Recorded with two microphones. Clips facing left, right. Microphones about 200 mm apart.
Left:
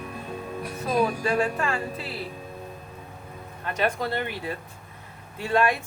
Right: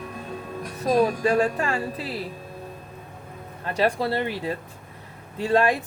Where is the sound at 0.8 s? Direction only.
35° right (ahead or behind).